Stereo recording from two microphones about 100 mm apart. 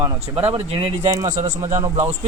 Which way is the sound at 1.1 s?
30° right (ahead or behind).